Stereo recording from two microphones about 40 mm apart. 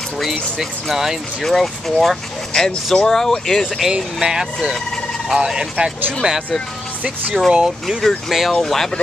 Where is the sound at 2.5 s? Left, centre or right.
Centre.